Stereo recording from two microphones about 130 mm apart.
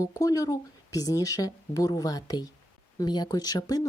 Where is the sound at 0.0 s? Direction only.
25° left (ahead or behind).